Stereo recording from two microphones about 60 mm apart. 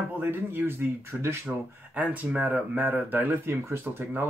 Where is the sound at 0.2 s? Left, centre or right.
Right.